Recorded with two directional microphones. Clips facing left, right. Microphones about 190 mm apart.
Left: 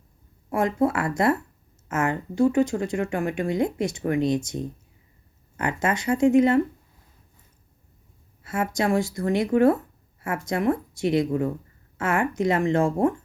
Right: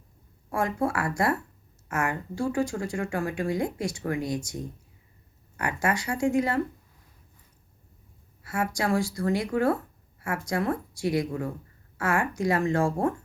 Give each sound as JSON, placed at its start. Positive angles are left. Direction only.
{"t": 0.5, "sound": "speech", "side_deg": 20}
{"t": 8.4, "sound": "speech", "side_deg": 20}